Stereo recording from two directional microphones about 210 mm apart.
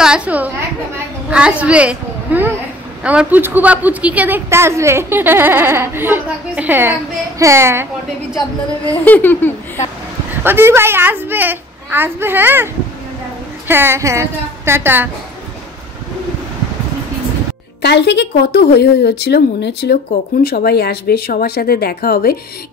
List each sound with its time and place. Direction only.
0.0 s a sound: 5° right (ahead or behind)
1.3 s a woman's voice: 5° right (ahead or behind)
9.0 s a sound: 10° left (ahead or behind)
10.4 s a woman's voice: 10° right (ahead or behind)
13.7 s a woman's voice: 10° right (ahead or behind)
17.8 s speech: 55° left (ahead or behind)